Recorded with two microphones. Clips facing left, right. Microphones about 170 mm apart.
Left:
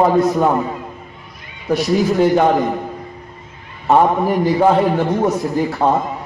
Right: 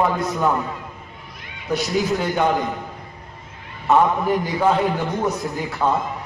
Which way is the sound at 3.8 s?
35° left (ahead or behind).